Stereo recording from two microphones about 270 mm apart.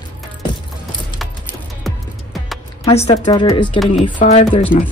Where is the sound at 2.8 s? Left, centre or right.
Left.